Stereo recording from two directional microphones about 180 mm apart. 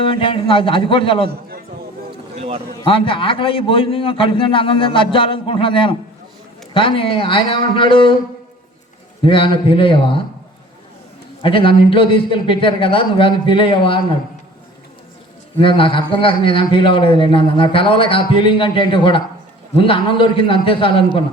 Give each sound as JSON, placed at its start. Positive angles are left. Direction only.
{"t": 0.1, "sound": "a man's voice", "side_deg": 30}
{"t": 2.3, "sound": "a sound", "side_deg": -35}
{"t": 2.8, "sound": "a man's voice", "side_deg": 30}
{"t": 9.2, "sound": "a man's voice", "side_deg": 30}
{"t": 11.4, "sound": "a man's voice", "side_deg": 30}
{"t": 15.5, "sound": "a man's voice", "side_deg": 30}